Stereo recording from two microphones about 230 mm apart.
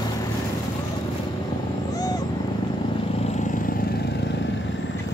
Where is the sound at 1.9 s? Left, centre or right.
Centre.